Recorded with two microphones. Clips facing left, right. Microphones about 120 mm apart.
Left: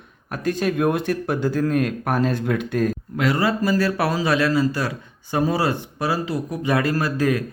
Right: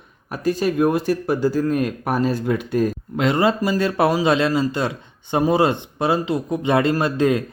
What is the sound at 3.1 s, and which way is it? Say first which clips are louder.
Speech: right 3 dB; 25° right (ahead or behind).